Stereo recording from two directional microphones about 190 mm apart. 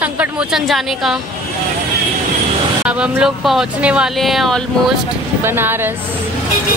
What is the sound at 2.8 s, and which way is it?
A woman's voice, 5° right (ahead or behind).